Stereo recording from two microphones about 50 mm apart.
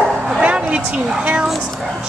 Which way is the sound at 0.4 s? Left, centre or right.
Right.